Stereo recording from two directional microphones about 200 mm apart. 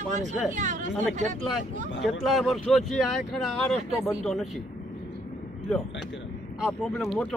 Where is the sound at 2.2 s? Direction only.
Centre (ahead or behind).